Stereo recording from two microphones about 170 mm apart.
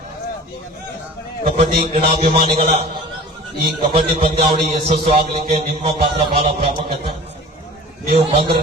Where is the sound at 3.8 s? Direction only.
30° right (ahead or behind).